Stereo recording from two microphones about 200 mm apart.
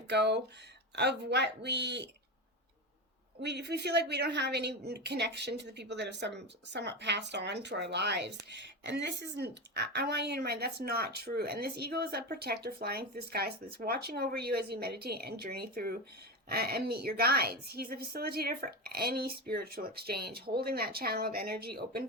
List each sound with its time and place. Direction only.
0.1 s a woman's voice: 60° right (ahead or behind)
3.4 s a woman's voice: 55° right (ahead or behind)